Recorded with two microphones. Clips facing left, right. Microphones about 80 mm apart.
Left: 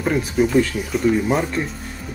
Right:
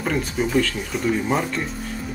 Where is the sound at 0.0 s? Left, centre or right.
Centre.